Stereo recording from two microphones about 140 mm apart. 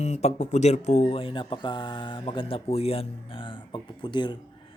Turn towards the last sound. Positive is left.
turn(degrees=35)  # may be behind; listen again after turning